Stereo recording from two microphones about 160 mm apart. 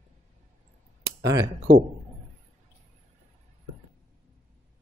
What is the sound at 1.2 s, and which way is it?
Speech, 20° right (ahead or behind).